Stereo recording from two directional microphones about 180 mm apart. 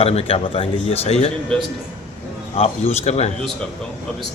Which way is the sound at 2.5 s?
35° left (ahead or behind).